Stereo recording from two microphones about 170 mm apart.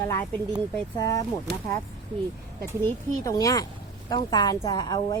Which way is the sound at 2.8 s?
20° left (ahead or behind).